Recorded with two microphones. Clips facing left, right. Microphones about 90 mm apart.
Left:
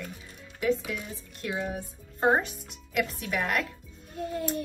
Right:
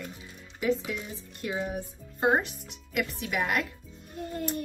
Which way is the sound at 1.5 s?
10° right (ahead or behind).